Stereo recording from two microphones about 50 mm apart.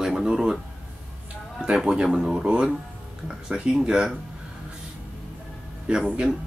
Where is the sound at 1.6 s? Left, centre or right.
Centre.